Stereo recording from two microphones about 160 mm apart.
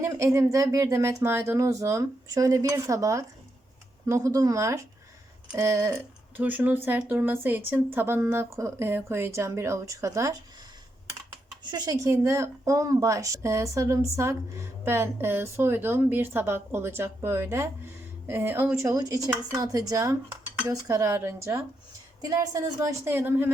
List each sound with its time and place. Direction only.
0.0 s speech: 15° right (ahead or behind)
11.6 s speech: 25° right (ahead or behind)